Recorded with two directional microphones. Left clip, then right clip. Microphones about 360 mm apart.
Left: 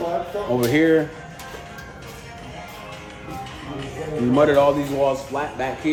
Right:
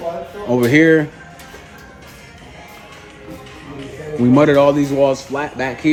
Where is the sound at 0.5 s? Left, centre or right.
Right.